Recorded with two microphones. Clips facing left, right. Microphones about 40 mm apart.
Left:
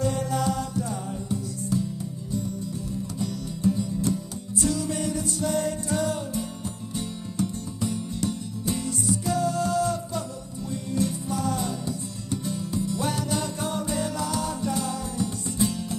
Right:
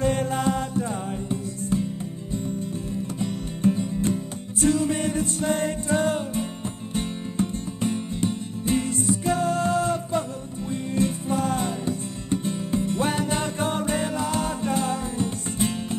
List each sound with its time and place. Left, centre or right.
0.0 s music: right
3.2 s music: right